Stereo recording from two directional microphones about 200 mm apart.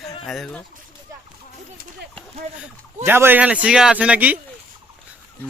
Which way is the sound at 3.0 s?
10° right (ahead or behind).